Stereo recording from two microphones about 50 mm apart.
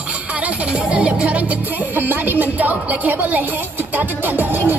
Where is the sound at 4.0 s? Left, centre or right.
Right.